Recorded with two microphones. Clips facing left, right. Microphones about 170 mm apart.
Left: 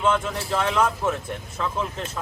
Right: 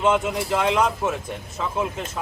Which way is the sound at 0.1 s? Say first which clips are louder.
Right 3 dB; 15° right (ahead or behind).